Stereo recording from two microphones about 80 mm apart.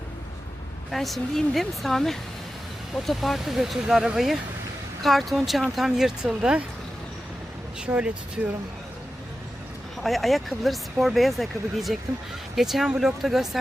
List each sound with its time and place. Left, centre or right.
0.9 s speech: centre
7.9 s speech: centre
10.0 s speech: centre